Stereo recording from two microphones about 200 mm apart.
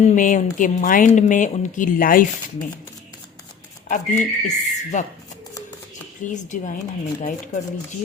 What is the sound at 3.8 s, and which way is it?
Speech, 40° left (ahead or behind).